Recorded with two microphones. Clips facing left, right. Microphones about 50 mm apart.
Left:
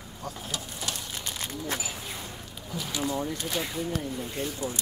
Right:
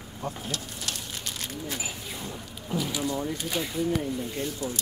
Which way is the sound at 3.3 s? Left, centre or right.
Centre.